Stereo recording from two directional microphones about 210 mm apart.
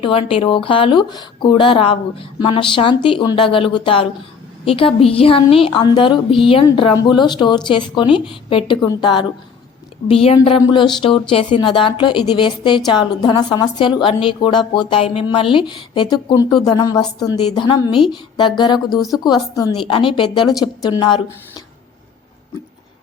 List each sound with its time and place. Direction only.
0.0 s speech: 25° left (ahead or behind)